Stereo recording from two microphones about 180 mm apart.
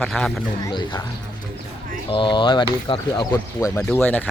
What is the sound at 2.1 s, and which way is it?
Speech, 25° left (ahead or behind).